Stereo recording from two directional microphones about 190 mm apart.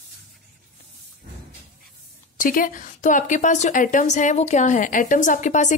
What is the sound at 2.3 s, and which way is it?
A woman's voice, 45° left (ahead or behind).